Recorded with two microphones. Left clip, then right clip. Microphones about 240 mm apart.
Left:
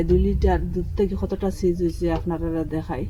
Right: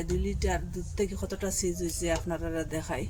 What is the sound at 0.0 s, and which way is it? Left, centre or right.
Speech, centre.